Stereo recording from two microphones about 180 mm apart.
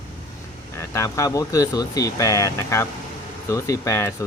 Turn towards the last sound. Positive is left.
turn(degrees=15)  # may be behind; listen again after turning